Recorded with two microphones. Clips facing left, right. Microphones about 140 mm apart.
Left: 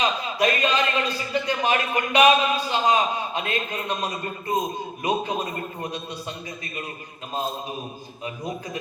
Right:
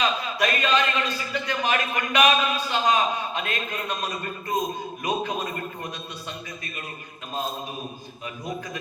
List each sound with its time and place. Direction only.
0.0 s a man's voice: 30° left (ahead or behind)